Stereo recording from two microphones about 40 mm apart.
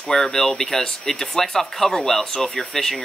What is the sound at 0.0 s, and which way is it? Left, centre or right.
Speech, left.